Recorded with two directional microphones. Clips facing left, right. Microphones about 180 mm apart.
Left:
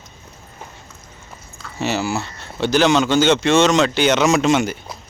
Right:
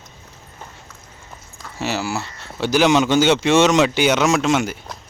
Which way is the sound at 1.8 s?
5° right (ahead or behind).